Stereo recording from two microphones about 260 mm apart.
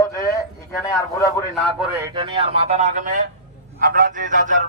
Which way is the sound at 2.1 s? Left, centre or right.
Centre.